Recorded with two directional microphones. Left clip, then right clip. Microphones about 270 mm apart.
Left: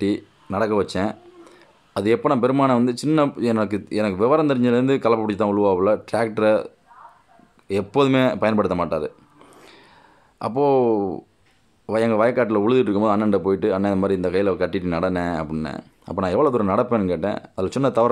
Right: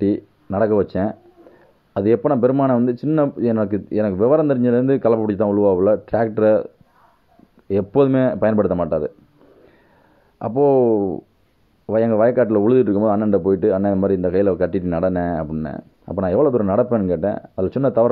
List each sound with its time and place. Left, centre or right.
0.0 s speech: centre
10.4 s speech: centre